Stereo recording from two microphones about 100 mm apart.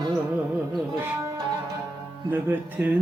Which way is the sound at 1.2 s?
35° right (ahead or behind).